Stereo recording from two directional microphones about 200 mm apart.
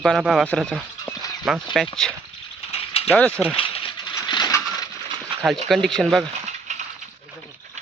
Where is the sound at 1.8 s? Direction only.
Centre (ahead or behind).